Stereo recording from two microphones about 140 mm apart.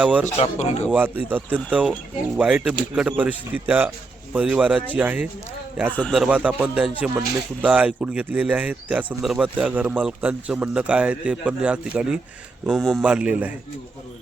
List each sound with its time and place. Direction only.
0.0 s speech: 10° right (ahead or behind)
0.3 s speech: 50° left (ahead or behind)
0.9 s speech: 15° right (ahead or behind)
5.9 s speech: 10° left (ahead or behind)
6.1 s a man's voice: 10° right (ahead or behind)